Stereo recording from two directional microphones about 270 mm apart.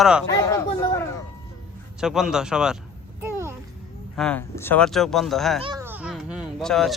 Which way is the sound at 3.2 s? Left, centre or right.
Centre.